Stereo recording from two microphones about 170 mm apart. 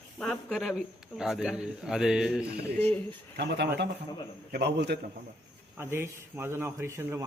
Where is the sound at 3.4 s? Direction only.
80° right.